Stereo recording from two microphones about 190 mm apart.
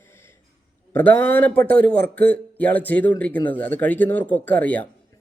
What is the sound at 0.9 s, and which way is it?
Speech, 10° left (ahead or behind).